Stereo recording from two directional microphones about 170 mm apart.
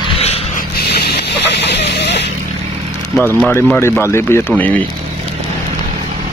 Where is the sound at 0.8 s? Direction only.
70° left (ahead or behind).